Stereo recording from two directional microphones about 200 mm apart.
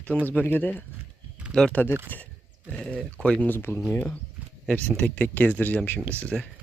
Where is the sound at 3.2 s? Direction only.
5° left (ahead or behind).